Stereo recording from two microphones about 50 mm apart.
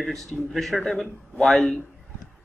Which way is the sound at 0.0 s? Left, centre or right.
Centre.